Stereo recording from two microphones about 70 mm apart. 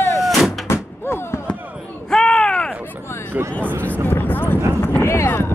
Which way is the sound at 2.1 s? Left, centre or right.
Centre.